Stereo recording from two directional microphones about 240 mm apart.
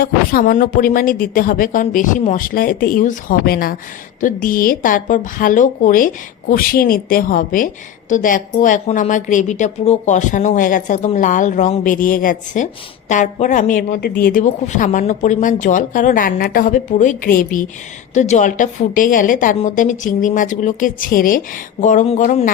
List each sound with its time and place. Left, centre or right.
0.0 s a woman's voice: left